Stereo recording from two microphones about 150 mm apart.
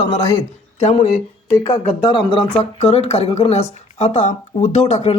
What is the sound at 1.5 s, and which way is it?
Speech, 35° left (ahead or behind).